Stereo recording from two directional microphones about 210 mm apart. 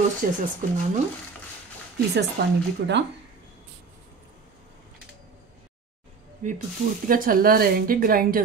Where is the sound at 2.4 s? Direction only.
50° right (ahead or behind).